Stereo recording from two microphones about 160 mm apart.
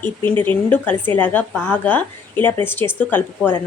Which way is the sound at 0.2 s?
15° left (ahead or behind).